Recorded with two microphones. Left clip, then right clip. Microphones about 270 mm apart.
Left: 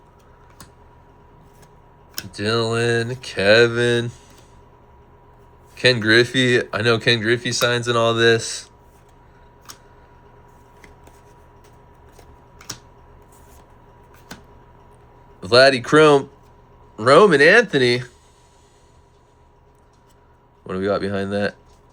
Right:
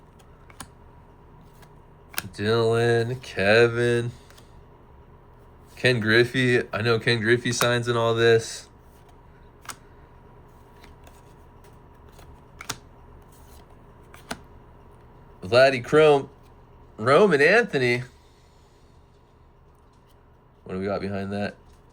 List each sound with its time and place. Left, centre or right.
2.3 s speech: centre
5.7 s speech: centre
15.4 s speech: centre
20.7 s speech: centre